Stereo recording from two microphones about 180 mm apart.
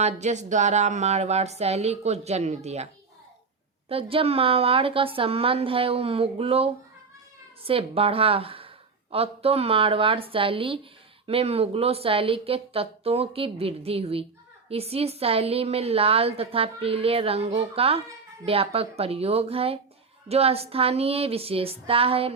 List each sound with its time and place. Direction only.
0.0 s a woman's voice: 40° right (ahead or behind)
3.8 s a woman's voice: 30° right (ahead or behind)